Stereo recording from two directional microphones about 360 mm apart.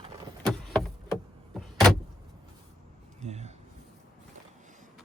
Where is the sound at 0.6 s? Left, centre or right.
Centre.